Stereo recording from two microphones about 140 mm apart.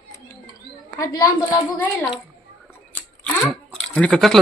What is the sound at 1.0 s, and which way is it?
Speech, 25° left (ahead or behind).